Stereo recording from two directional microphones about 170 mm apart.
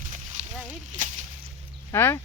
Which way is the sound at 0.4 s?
45° right (ahead or behind).